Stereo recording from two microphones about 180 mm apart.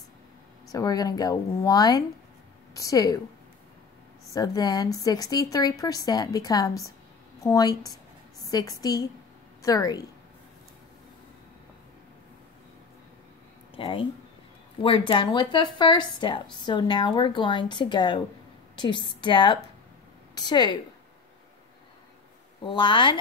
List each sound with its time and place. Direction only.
0.7 s a woman's voice: 20° left (ahead or behind)
4.3 s speech: 20° left (ahead or behind)
13.7 s speech: 30° left (ahead or behind)
22.6 s speech: 25° left (ahead or behind)